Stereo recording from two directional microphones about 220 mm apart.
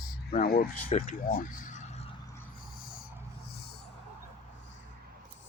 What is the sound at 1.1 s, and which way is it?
Speech, 35° left (ahead or behind).